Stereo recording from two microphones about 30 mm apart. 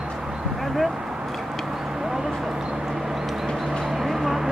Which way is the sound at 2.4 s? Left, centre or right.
Centre.